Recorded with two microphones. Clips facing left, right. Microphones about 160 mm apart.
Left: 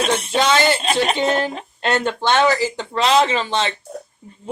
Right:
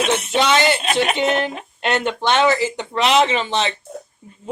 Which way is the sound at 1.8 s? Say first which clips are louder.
Even; 20° right (ahead or behind).